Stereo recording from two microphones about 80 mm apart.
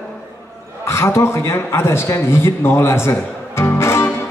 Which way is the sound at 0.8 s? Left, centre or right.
Left.